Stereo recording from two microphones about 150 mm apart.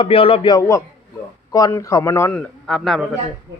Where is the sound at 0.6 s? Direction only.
20° left (ahead or behind).